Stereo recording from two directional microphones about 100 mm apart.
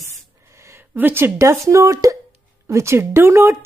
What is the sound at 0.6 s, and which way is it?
A woman's voice, 20° right (ahead or behind).